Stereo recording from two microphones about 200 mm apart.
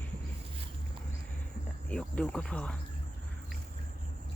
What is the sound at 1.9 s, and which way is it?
Speech, 5° left (ahead or behind).